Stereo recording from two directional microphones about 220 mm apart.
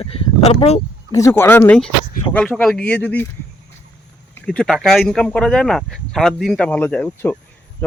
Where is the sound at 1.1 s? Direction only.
15° left (ahead or behind).